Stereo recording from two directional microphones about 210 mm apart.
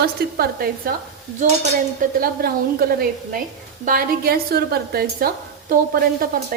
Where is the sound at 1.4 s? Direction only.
35° right (ahead or behind).